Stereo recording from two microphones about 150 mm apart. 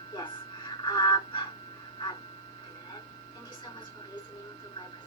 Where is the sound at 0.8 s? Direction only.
30° left (ahead or behind).